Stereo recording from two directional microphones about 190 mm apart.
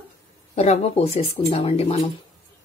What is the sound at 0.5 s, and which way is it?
Speech, 35° left (ahead or behind).